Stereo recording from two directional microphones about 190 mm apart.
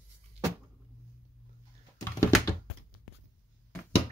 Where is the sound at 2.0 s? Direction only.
15° left (ahead or behind).